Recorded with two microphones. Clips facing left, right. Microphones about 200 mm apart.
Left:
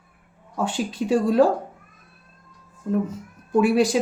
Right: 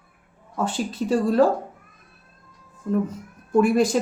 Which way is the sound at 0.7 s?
10° left (ahead or behind).